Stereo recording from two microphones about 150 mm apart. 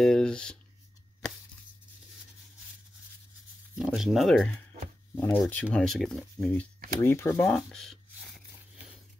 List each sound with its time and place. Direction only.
0.0 s speech: 5° left (ahead or behind)
3.7 s speech: 5° right (ahead or behind)
5.1 s speech: 15° left (ahead or behind)
6.3 s speech: 15° left (ahead or behind)